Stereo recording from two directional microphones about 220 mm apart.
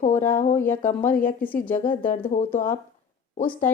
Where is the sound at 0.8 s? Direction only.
35° left (ahead or behind).